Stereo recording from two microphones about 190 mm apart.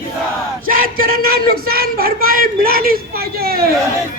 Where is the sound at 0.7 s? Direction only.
50° right (ahead or behind).